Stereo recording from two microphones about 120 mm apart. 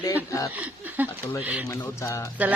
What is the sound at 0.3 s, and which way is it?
Speech, 25° left (ahead or behind).